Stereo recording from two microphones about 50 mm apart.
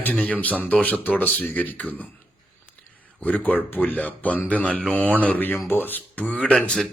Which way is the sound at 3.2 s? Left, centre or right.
Left.